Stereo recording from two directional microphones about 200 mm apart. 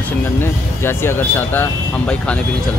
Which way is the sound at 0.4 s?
10° left (ahead or behind).